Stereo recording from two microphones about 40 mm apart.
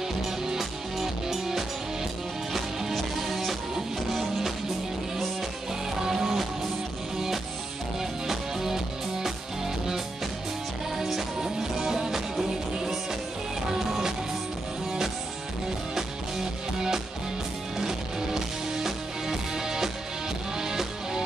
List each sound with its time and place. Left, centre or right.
0.5 s music: centre
2.9 s music: centre
5.9 s music: centre
8.0 s music: centre
11.0 s music: centre
17.7 s music: centre